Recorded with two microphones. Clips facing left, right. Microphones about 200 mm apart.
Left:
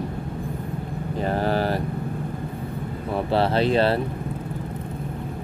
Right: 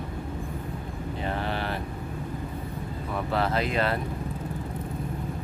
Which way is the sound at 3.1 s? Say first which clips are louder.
Left 6 dB; 30° left (ahead or behind).